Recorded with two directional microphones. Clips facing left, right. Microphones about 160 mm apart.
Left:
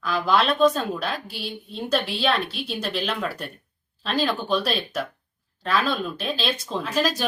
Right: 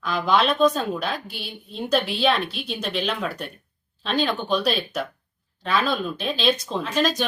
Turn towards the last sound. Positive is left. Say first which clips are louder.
# right 1 dB
turn(degrees=5)  # may be behind; listen again after turning